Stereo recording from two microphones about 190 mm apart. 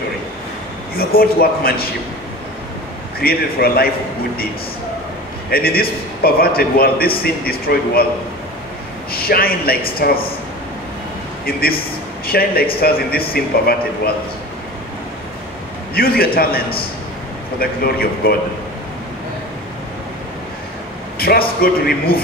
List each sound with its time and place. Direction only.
0.9 s a man's voice: 50° left (ahead or behind)
3.2 s a man's voice: 55° left (ahead or behind)
5.5 s a man's voice: 50° left (ahead or behind)
9.1 s a man's voice: 50° left (ahead or behind)
12.3 s a man's voice: 50° left (ahead or behind)
15.9 s a man's voice: 55° left (ahead or behind)
21.2 s a man's voice: 55° left (ahead or behind)